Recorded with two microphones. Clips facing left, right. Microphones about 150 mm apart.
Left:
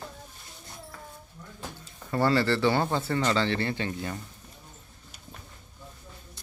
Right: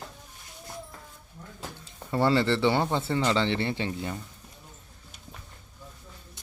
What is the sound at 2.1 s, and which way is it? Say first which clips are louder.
A man's voice: right 1 dB; 25° right (ahead or behind).